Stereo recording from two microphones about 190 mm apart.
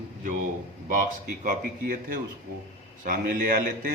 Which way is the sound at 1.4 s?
45° right (ahead or behind).